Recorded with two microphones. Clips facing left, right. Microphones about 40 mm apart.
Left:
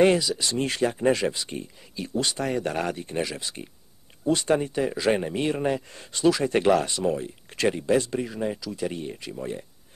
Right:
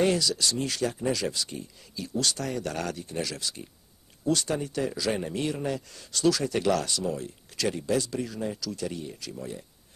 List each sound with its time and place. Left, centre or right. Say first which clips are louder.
0.2 s speech: even; left
0.6 s speech: left 4 dB; left